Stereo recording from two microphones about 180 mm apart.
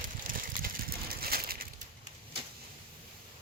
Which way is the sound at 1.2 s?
55° right (ahead or behind).